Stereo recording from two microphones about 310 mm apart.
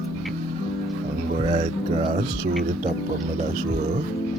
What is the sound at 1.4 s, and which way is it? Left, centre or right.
Speech, centre.